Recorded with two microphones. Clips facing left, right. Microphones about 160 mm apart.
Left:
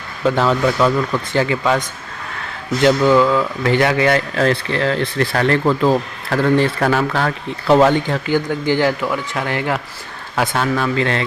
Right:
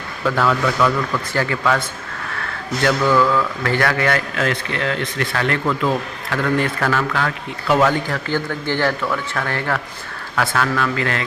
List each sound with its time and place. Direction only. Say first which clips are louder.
0.3 s speech: left 3 dB; 25° left (ahead or behind)
2.8 s speech: left 4 dB; 20° left (ahead or behind)
4.4 s speech: left 5 dB; 30° left (ahead or behind)